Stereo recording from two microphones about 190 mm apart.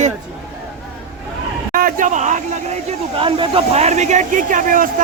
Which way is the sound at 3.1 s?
25° right (ahead or behind).